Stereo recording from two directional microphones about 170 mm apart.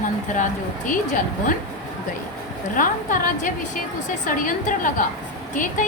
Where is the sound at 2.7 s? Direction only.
55° left (ahead or behind).